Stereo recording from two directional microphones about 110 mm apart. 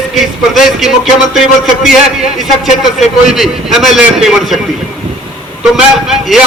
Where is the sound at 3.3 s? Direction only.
Centre (ahead or behind).